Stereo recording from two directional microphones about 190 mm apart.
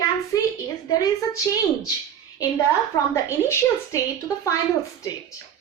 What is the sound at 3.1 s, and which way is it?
A woman's voice, 15° left (ahead or behind).